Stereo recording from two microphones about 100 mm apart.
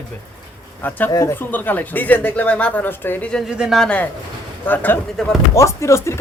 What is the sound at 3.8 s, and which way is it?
Speech, 15° left (ahead or behind).